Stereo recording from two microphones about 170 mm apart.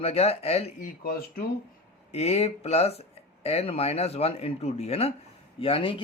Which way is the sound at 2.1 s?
40° left (ahead or behind).